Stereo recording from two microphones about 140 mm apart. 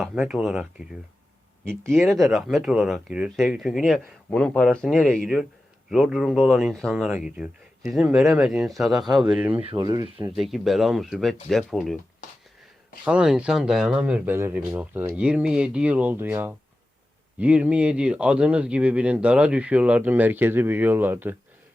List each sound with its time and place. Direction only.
0.2 s speech: 5° right (ahead or behind)
1.9 s speech: centre (ahead or behind)
9.6 s speech: 45° right (ahead or behind)
10.3 s speech: centre (ahead or behind)
12.2 s a sound: 60° left (ahead or behind)
13.1 s speech: 5° right (ahead or behind)